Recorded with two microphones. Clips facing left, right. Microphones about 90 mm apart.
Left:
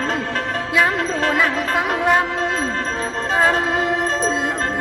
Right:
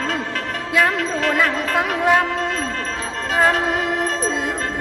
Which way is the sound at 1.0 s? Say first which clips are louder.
Left 1 dB; 40° left (ahead or behind).